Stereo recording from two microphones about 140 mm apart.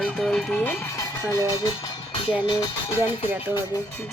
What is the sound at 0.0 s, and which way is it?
Music, 5° left (ahead or behind).